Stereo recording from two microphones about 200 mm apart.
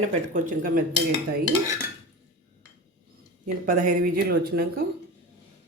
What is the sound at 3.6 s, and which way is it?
Speech, 40° right (ahead or behind).